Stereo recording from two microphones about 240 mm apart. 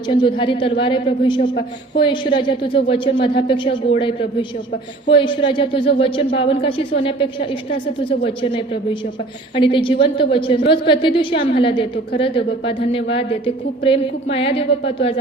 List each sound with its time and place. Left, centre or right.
0.1 s speech: left